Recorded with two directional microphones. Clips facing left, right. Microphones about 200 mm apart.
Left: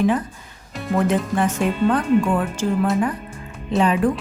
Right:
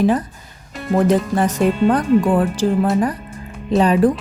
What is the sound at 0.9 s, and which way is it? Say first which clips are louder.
Speech: right 4 dB; 35° right (ahead or behind).